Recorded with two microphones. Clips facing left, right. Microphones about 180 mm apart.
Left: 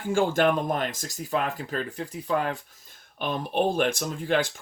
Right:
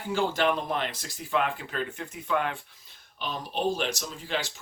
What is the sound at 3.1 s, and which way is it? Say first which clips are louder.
Speech: left 6 dB; 55° left (ahead or behind).